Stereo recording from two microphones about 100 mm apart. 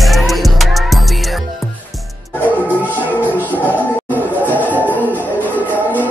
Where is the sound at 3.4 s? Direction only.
15° left (ahead or behind).